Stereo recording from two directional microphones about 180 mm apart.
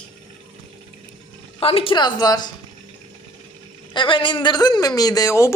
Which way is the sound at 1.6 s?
30° left (ahead or behind).